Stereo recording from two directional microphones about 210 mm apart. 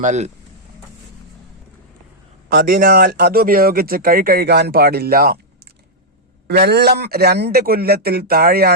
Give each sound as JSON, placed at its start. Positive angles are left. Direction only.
{"t": 0.0, "sound": "speech", "side_deg": -35}
{"t": 2.5, "sound": "speech", "side_deg": -45}
{"t": 6.5, "sound": "speech", "side_deg": -50}